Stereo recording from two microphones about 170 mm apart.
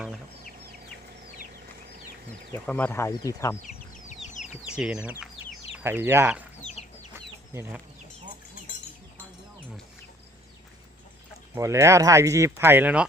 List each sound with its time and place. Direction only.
2.5 s speech: 10° left (ahead or behind)
3.6 s chicken: 45° left (ahead or behind)
4.8 s speech: 5° right (ahead or behind)
6.6 s chicken: 40° left (ahead or behind)
7.5 s speech: 15° right (ahead or behind)
11.5 s speech: 15° right (ahead or behind)